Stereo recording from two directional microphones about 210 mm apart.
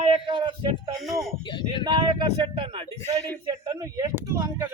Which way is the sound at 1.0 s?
Centre (ahead or behind).